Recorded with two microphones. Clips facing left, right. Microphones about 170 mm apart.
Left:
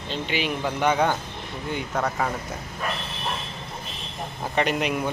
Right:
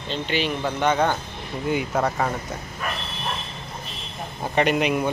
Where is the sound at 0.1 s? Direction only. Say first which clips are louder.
Right 2 dB; 10° left (ahead or behind).